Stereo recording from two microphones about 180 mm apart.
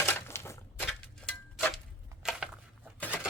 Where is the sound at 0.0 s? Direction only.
15° left (ahead or behind).